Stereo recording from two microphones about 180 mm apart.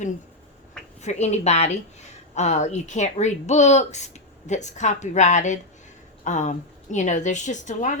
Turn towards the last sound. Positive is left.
turn(degrees=45)  # may be behind; listen again after turning